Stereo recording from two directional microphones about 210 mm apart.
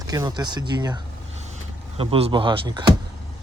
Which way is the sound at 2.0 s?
25° right (ahead or behind).